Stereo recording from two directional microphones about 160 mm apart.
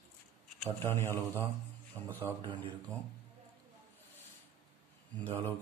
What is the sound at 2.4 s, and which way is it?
Speech, 30° right (ahead or behind).